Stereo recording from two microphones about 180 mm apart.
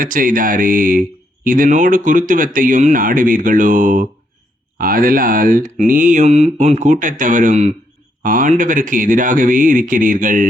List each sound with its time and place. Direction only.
0.0 s speech: 50° right (ahead or behind)